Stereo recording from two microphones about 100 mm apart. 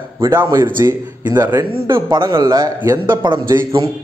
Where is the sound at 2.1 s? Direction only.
50° right (ahead or behind).